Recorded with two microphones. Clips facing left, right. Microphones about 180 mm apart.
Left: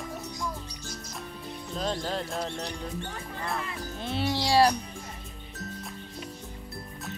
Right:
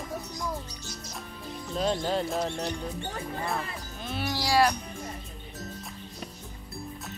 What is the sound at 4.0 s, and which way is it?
Speech, 25° left (ahead or behind).